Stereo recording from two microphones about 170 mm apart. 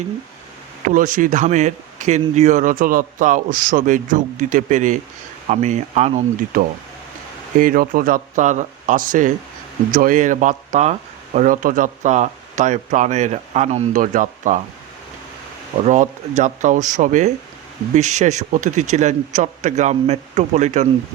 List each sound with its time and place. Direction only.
0.9 s speech: 50° right (ahead or behind)
7.6 s speech: 55° right (ahead or behind)
15.8 s speech: 45° right (ahead or behind)